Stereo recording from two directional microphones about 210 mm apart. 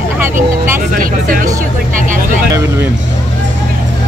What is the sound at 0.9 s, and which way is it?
Speech, 40° right (ahead or behind).